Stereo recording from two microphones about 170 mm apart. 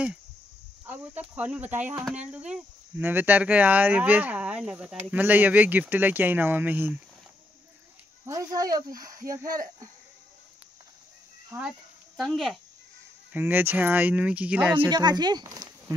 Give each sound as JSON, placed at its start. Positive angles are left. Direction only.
{"t": 0.8, "sound": "speech", "side_deg": -10}
{"t": 8.3, "sound": "speech", "side_deg": -20}
{"t": 11.5, "sound": "speech", "side_deg": -20}
{"t": 12.2, "sound": "speech", "side_deg": 0}
{"t": 13.3, "sound": "speech", "side_deg": -10}
{"t": 14.9, "sound": "speech", "side_deg": -25}